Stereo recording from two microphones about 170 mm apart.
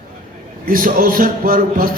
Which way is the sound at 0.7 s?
55° right (ahead or behind).